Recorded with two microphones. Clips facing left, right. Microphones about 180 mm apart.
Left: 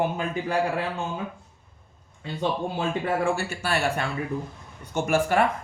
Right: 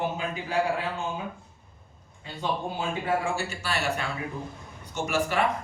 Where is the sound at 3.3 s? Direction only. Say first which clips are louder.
Left 3 dB; 50° left (ahead or behind).